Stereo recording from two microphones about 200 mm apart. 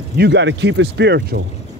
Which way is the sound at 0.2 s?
60° right (ahead or behind).